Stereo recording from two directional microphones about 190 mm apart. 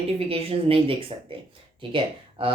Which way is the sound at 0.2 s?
30° right (ahead or behind).